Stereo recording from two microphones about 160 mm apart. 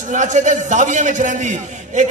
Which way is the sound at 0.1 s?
50° right (ahead or behind).